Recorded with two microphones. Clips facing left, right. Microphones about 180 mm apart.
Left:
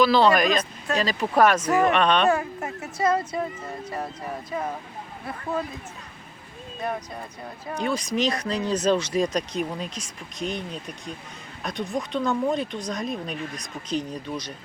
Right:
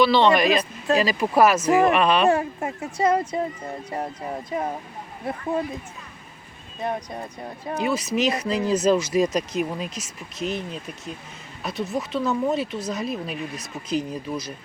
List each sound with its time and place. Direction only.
0.0 s speech: centre (ahead or behind)
2.6 s speech: 25° right (ahead or behind)
4.5 s speech: 20° right (ahead or behind)
7.8 s speech: 5° right (ahead or behind)